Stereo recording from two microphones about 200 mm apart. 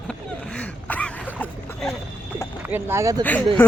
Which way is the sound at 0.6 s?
5° left (ahead or behind).